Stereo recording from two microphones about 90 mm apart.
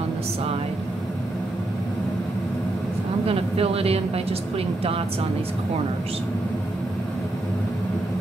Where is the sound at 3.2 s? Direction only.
90° right.